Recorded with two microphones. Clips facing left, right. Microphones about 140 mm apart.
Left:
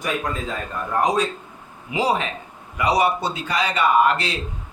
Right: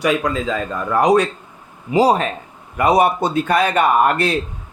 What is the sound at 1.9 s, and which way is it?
Speech, 40° right (ahead or behind).